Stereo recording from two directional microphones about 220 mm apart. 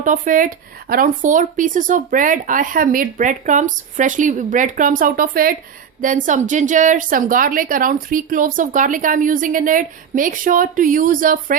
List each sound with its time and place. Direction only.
0.0 s a woman's voice: 35° right (ahead or behind)